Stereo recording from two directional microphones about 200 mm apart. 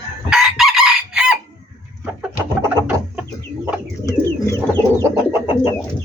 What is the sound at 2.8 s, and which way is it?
Chicken, 5° right (ahead or behind).